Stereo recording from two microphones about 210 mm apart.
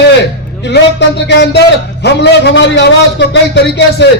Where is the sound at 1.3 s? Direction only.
55° left (ahead or behind).